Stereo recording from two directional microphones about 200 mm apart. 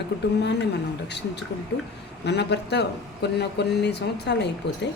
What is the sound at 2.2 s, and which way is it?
Speech, 55° left (ahead or behind).